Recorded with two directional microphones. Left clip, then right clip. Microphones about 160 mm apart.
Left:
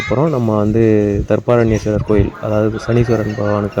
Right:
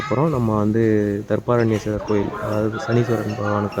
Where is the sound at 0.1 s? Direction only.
15° left (ahead or behind).